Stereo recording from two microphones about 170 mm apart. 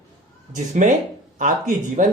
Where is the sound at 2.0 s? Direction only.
50° right (ahead or behind).